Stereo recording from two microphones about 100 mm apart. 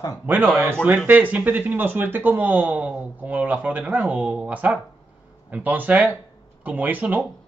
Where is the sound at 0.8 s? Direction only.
15° right (ahead or behind).